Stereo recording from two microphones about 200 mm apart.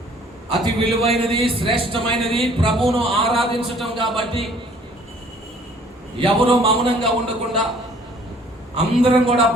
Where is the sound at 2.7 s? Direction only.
Centre (ahead or behind).